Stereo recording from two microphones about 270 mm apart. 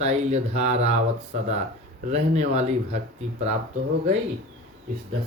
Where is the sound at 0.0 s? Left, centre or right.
Right.